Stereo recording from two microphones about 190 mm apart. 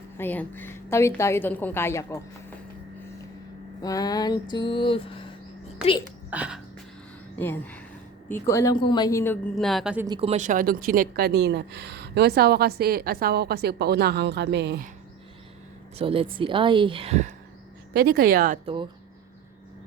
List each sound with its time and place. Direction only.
0.2 s a woman's voice: 10° left (ahead or behind)
3.8 s a sound: 20° left (ahead or behind)
6.3 s a sound: 5° right (ahead or behind)
7.3 s a woman's voice: 10° left (ahead or behind); by 10.1 s 5° right (ahead or behind)
10.1 s speech: 30° right (ahead or behind); by 14.8 s 65° right (ahead or behind)
16.0 s speech: 30° right (ahead or behind)
17.9 s speech: 55° right (ahead or behind)
18.6 s speech: 25° right (ahead or behind)